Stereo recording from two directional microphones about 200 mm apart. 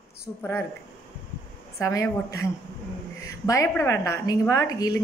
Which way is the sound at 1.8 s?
15° left (ahead or behind).